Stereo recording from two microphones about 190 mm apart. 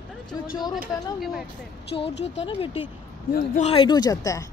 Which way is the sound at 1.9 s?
25° left (ahead or behind).